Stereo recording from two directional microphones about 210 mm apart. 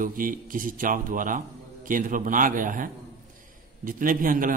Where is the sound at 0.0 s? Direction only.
40° right (ahead or behind).